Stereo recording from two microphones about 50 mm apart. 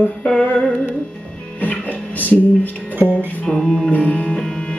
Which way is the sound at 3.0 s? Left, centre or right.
Right.